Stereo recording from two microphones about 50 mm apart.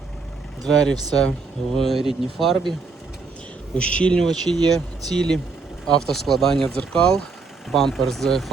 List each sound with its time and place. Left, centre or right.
0.7 s speech: centre
3.8 s speech: left
4.2 s speech: centre
6.7 s speech: centre